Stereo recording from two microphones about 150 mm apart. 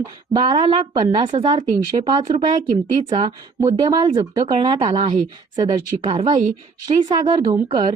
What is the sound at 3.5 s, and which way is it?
Speech, 25° right (ahead or behind).